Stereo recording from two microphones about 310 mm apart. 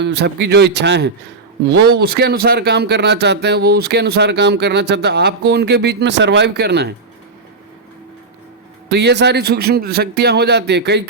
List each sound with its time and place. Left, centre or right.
0.0 s speech: right
8.9 s speech: right